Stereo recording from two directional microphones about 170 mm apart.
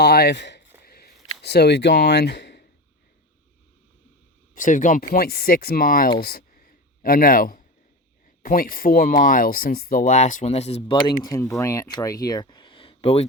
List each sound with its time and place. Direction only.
0.0 s speech: 70° left (ahead or behind); by 0.6 s 90° left
0.8 s a sound: 65° left (ahead or behind); by 2.6 s 80° left
4.5 s speech: 50° left (ahead or behind); by 13.2 s 35° left (ahead or behind)